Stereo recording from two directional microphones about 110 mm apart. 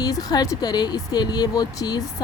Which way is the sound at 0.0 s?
35° left (ahead or behind).